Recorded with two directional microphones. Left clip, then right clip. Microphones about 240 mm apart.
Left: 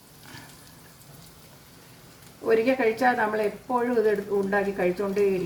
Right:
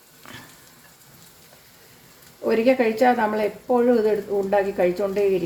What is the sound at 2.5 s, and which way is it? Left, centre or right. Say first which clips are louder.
Speech: right 3 dB; right.